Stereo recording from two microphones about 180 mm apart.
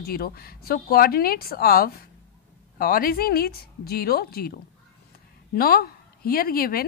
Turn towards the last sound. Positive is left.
turn(degrees=55)  # may be behind; listen again after turning